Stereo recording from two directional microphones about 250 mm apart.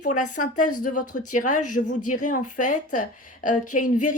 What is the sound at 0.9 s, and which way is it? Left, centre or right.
Speech, left.